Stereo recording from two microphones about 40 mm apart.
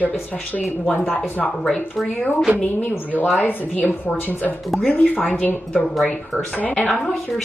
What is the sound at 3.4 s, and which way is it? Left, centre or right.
Speech, left.